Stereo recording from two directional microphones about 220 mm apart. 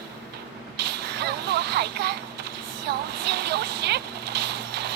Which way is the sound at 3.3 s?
50° right (ahead or behind).